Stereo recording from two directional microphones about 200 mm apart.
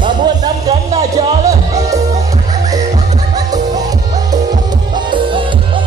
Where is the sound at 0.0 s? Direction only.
20° right (ahead or behind).